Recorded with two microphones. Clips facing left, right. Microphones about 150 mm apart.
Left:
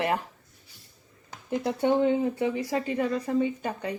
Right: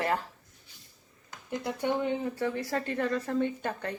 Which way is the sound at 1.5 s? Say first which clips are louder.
Left 6 dB; 20° left (ahead or behind).